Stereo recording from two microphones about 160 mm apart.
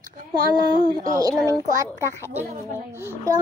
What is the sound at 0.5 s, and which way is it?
A child's voice, 25° right (ahead or behind).